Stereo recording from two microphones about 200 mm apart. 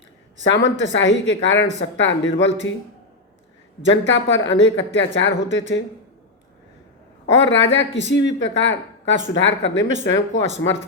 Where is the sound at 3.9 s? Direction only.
65° left (ahead or behind).